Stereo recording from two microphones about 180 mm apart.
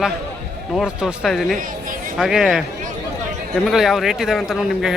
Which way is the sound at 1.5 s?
50° right (ahead or behind).